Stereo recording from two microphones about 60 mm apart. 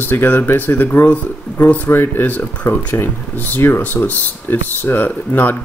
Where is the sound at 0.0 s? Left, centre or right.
Left.